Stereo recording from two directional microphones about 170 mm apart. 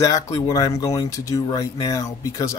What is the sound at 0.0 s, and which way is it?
Speech, 20° left (ahead or behind).